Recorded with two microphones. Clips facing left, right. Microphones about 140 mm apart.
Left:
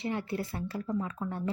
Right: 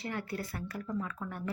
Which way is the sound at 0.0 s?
25° left (ahead or behind).